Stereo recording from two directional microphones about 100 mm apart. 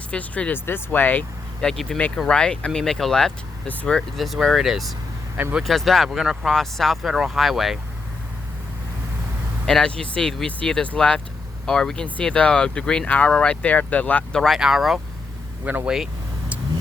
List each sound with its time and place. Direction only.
0.1 s speech: 15° left (ahead or behind)
1.6 s speech: 5° left (ahead or behind)
9.6 s speech: 5° left (ahead or behind)
14.3 s speech: centre (ahead or behind)
15.6 s speech: 20° right (ahead or behind)